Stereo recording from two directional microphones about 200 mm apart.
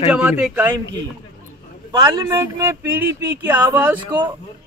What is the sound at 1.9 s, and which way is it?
Speech, 20° right (ahead or behind).